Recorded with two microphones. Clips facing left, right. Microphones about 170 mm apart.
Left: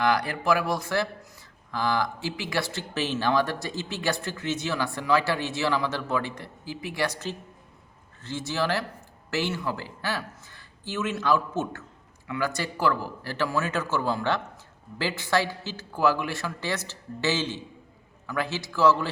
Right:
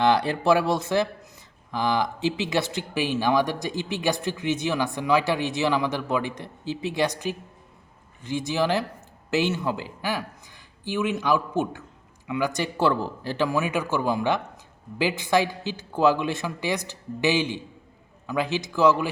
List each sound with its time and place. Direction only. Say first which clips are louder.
0.0 s speech: right 4 dB; 25° right (ahead or behind)